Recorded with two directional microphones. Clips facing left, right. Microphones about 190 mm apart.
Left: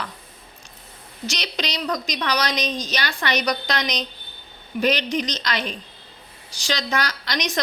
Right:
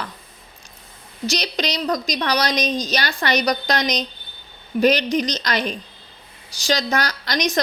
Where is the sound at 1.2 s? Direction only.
40° right (ahead or behind).